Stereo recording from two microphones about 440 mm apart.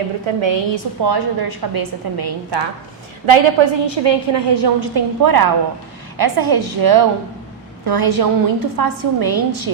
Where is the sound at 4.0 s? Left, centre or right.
Right.